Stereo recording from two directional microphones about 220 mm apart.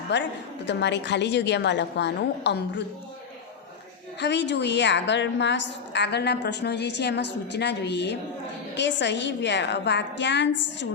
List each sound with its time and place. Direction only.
0.1 s a woman's voice: 50° left (ahead or behind)
4.2 s a woman's voice: 50° left (ahead or behind)